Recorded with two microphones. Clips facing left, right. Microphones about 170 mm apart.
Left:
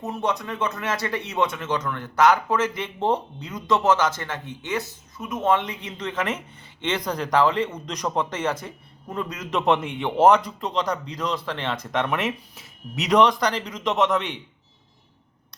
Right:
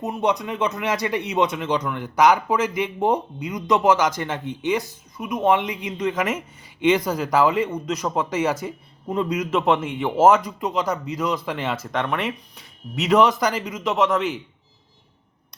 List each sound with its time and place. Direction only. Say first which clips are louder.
0.0 s a man's voice: right 4 dB; 15° right (ahead or behind)
9.5 s speech: left 3 dB; centre (ahead or behind)